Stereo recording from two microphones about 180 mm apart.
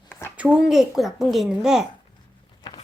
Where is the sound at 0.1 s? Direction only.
15° left (ahead or behind).